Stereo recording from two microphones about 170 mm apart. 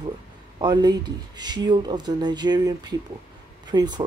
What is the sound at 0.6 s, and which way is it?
Speech, 25° right (ahead or behind).